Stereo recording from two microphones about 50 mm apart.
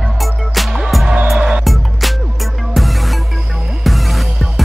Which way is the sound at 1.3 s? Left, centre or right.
Centre.